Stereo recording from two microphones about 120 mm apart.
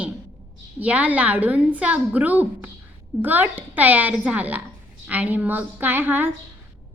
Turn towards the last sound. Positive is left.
turn(degrees=-15)  # may be behind; listen again after turning